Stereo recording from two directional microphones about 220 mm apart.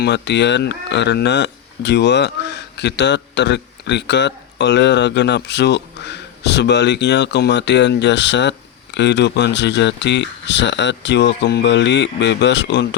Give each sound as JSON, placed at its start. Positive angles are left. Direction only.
{"t": 0.0, "sound": "speech", "side_deg": 50}